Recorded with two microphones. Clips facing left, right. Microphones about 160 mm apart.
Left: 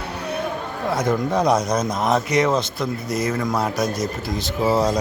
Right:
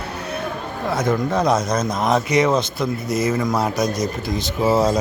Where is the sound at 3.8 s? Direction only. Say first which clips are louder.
Right 2 dB; 20° right (ahead or behind).